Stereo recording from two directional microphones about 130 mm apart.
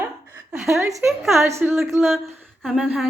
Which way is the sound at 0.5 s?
5° right (ahead or behind).